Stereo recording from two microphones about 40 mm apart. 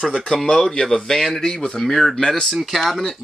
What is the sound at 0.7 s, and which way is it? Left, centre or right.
Speech, centre.